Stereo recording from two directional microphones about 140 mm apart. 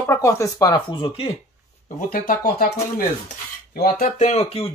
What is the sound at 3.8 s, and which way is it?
Speech, 80° left.